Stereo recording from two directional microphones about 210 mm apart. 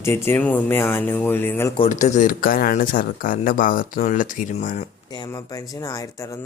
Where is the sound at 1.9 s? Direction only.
35° left (ahead or behind).